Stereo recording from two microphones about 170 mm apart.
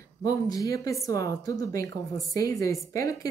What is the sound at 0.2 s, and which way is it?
Speech, 20° left (ahead or behind).